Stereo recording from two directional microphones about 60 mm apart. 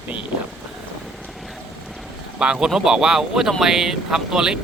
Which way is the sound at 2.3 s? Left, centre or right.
Centre.